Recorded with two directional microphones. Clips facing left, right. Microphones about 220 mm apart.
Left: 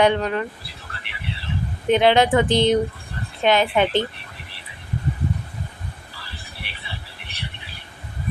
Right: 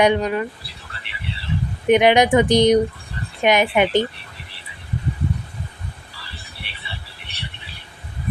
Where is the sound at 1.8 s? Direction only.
15° right (ahead or behind).